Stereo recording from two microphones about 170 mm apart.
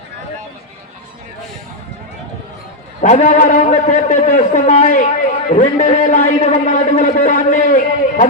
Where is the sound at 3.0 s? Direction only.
50° left (ahead or behind).